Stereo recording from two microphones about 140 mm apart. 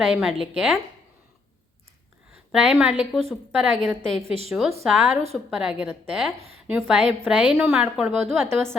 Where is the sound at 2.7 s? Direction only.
5° right (ahead or behind).